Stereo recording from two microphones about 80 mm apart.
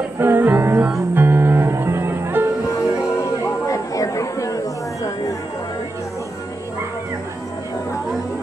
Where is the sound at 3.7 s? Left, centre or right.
Left.